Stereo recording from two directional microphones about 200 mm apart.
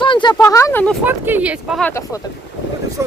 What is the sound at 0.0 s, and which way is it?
Speech, 25° left (ahead or behind).